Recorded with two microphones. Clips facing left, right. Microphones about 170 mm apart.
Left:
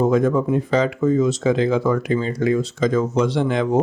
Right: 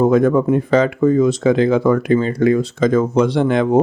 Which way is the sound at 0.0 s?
55° right (ahead or behind).